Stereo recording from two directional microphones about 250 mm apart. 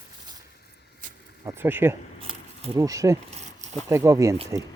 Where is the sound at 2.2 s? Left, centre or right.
Centre.